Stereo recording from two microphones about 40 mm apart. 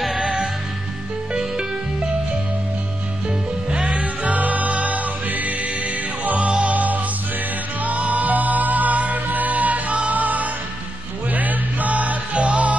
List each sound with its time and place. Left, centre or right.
1.3 s music: right
3.3 s music: right